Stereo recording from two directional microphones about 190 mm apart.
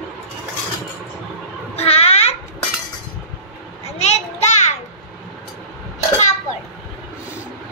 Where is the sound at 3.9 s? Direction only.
35° left (ahead or behind).